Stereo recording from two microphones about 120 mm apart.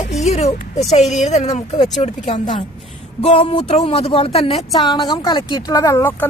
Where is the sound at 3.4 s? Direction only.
45° left (ahead or behind).